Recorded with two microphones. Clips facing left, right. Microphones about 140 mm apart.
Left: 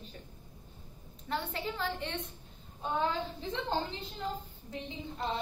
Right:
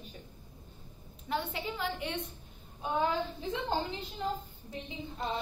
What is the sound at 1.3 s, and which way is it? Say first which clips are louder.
Speech: right 1 dB; 10° right (ahead or behind).